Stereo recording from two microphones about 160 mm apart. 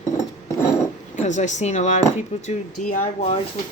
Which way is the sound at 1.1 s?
50° left (ahead or behind).